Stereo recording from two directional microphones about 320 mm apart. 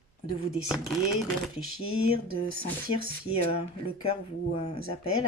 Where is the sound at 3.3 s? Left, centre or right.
Centre.